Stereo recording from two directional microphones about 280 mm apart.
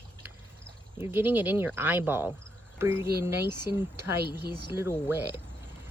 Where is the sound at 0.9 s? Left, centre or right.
Centre.